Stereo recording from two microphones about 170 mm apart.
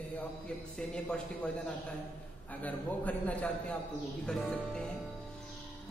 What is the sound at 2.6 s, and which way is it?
Speech, 10° left (ahead or behind).